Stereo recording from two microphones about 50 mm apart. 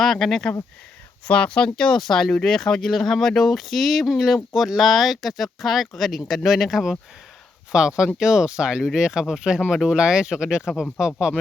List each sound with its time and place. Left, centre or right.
0.0 s speech: centre
1.3 s speech: left
1.7 s speech: centre
7.7 s speech: centre